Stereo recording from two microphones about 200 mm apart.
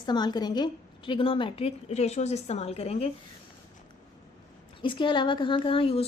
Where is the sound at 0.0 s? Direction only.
20° left (ahead or behind).